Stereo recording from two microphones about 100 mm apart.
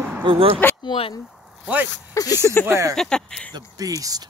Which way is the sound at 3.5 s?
35° right (ahead or behind).